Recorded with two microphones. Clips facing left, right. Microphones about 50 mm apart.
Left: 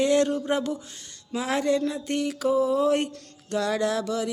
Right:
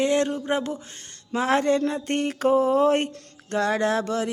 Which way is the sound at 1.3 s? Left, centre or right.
Right.